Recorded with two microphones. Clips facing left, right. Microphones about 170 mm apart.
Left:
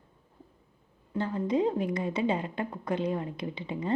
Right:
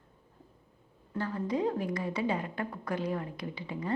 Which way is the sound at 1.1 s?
20° left (ahead or behind).